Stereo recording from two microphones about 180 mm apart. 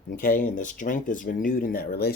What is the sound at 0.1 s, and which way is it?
Speech, 50° left (ahead or behind).